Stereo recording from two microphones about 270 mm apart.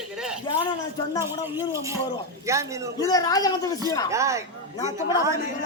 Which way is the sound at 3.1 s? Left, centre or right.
Centre.